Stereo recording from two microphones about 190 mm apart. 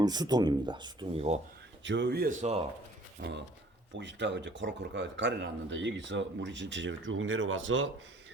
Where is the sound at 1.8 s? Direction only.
70° right (ahead or behind).